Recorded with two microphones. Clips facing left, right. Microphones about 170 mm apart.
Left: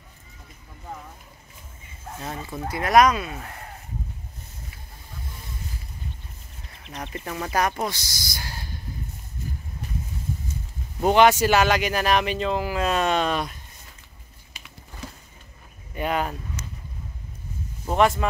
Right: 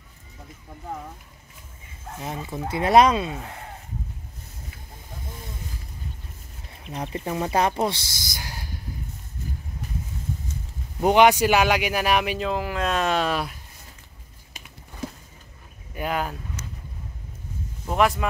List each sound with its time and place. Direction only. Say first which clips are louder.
2.1 s speech: right 1 dB; 15° right (ahead or behind)
2.8 s speech: right 1 dB; 30° right (ahead or behind)
6.8 s speech: right 4 dB; 10° right (ahead or behind); by 8.4 s 30° right (ahead or behind)
8.4 s a sound: even; 15° right (ahead or behind)
11.0 s speech: even; 15° right (ahead or behind)
15.9 s speech: left 2 dB; centre (ahead or behind)
17.8 s speech: left 1 dB; centre (ahead or behind)